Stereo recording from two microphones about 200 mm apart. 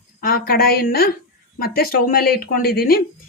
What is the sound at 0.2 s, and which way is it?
Speech, 45° left (ahead or behind).